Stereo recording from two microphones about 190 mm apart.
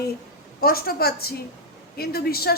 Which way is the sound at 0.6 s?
50° left (ahead or behind).